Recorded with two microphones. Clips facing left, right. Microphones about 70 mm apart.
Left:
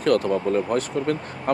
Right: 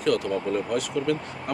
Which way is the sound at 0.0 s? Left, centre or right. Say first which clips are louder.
Left 4 dB; left.